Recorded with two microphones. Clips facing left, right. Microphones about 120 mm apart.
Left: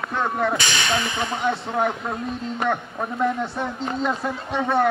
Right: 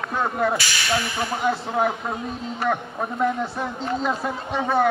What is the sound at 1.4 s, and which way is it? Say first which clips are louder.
Speech: right 1 dB; centre (ahead or behind).